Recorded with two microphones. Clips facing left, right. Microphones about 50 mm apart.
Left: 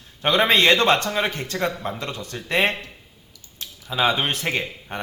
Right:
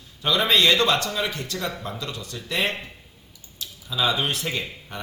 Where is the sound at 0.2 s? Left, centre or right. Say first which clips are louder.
Left 3 dB; left.